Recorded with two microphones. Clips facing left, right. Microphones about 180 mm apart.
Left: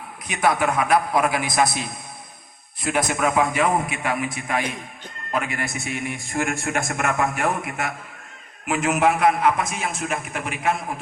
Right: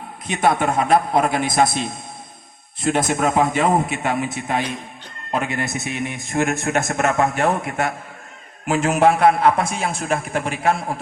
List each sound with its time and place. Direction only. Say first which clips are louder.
0.3 s a man's voice: right 2 dB; 25° right (ahead or behind)